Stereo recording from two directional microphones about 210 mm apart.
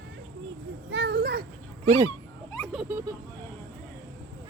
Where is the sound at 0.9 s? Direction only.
55° right (ahead or behind).